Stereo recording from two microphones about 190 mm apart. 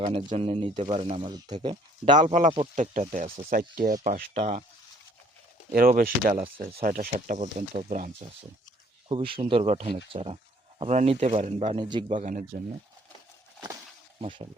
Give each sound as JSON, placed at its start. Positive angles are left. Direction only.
{"t": 0.0, "sound": "speech", "side_deg": -25}
{"t": 2.1, "sound": "speech", "side_deg": -40}
{"t": 5.7, "sound": "speech", "side_deg": -50}
{"t": 9.0, "sound": "speech", "side_deg": -30}
{"t": 12.2, "sound": "speech", "side_deg": -40}
{"t": 14.2, "sound": "speech", "side_deg": -25}